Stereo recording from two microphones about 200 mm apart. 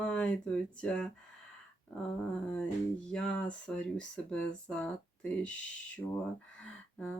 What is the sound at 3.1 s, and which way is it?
Speech, 5° left (ahead or behind).